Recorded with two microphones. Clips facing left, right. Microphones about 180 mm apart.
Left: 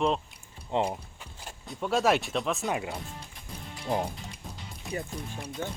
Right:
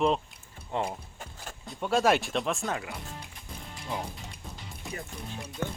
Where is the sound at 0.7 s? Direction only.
20° left (ahead or behind).